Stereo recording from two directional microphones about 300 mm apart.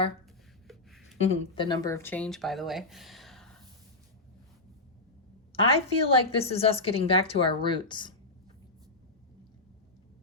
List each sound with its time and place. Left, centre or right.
0.7 s a sound: centre
1.2 s speech: centre
5.6 s a woman's voice: centre